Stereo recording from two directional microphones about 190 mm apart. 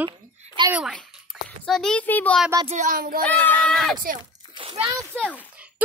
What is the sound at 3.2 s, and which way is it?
Speech, 10° left (ahead or behind).